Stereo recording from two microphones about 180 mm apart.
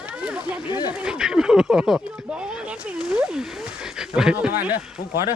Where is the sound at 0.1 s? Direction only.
5° right (ahead or behind).